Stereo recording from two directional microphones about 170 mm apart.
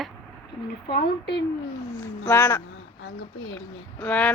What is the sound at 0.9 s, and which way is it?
Speech, 75° left (ahead or behind).